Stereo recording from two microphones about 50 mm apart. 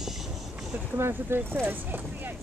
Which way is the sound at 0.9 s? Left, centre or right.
Right.